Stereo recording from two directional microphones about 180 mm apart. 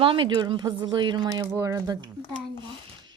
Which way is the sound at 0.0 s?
30° right (ahead or behind).